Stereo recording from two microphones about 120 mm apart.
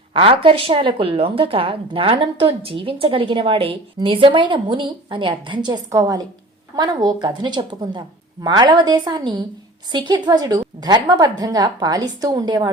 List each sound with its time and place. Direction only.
0.1 s a woman's voice: 50° right (ahead or behind)